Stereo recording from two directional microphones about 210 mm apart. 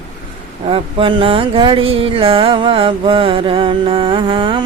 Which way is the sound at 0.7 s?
25° right (ahead or behind).